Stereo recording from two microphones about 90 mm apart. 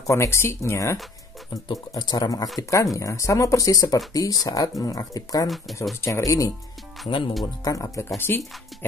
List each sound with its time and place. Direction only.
0.0 s speech: 35° left (ahead or behind)
1.5 s speech: 45° left (ahead or behind)
7.1 s speech: 75° left (ahead or behind)
7.6 s speech: 35° left (ahead or behind)
8.3 s speech: 25° left (ahead or behind)